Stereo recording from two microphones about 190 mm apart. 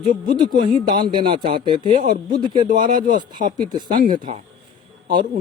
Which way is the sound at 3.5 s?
20° right (ahead or behind).